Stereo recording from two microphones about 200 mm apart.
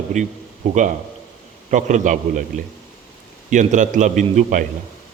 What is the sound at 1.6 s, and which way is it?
Speech, 40° right (ahead or behind).